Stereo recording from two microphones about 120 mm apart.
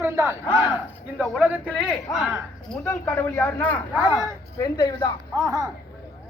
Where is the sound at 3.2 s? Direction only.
15° left (ahead or behind).